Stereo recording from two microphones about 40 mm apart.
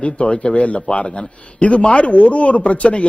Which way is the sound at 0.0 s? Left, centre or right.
Left.